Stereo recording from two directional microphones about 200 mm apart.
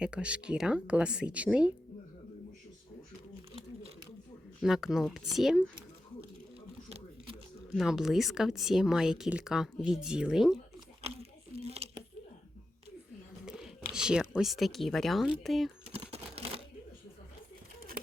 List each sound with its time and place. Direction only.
0.0 s speech: 5° right (ahead or behind)
4.6 s speech: centre (ahead or behind)
7.8 s speech: centre (ahead or behind)
11.0 s a sound: 30° right (ahead or behind)
13.4 s speech: 5° right (ahead or behind)
15.9 s crumpling: 30° right (ahead or behind)